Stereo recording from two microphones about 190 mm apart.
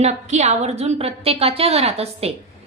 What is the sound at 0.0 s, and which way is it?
A woman's voice, 35° right (ahead or behind).